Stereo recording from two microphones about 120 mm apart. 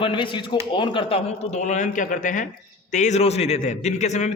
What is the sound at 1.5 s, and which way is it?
Speech, 85° left.